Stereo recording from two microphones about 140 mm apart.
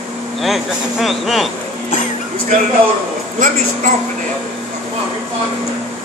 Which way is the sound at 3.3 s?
70° right (ahead or behind).